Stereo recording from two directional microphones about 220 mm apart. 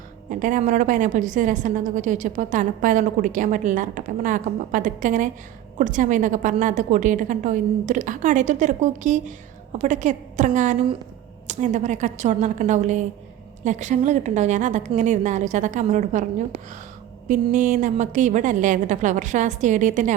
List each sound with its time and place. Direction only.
0.3 s a woman's voice: 35° right (ahead or behind)
17.2 s a woman's voice: 35° right (ahead or behind)